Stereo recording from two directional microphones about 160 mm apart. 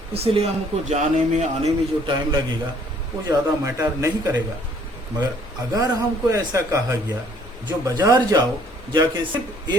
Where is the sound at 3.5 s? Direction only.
20° right (ahead or behind).